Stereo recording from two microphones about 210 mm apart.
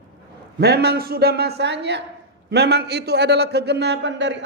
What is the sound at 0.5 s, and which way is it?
A man's voice, 50° right (ahead or behind).